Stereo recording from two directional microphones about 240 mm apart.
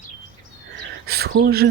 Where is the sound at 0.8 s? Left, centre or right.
Right.